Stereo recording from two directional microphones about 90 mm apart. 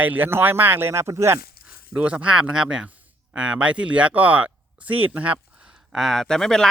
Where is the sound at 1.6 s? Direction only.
15° right (ahead or behind).